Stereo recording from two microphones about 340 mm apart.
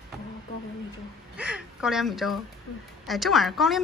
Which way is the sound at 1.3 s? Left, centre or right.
Centre.